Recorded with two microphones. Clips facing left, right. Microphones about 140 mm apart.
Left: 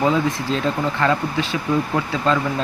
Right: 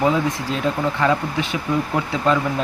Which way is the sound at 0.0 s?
15° right (ahead or behind).